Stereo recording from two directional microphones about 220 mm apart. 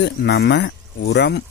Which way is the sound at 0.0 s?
50° left (ahead or behind).